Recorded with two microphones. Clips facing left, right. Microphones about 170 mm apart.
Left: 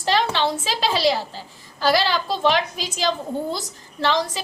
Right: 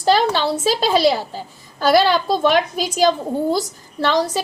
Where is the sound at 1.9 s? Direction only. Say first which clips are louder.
Right 6 dB; 45° right (ahead or behind).